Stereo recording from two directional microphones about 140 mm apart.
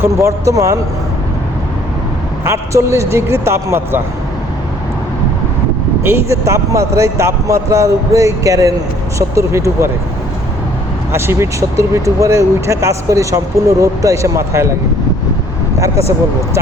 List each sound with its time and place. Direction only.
0.0 s speech: 20° right (ahead or behind)
2.4 s speech: 20° right (ahead or behind)
6.0 s speech: 20° right (ahead or behind)
11.1 s speech: 20° right (ahead or behind)